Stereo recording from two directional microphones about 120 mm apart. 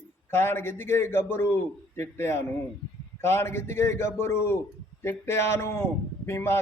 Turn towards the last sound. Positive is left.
turn(degrees=20)  # may be behind; listen again after turning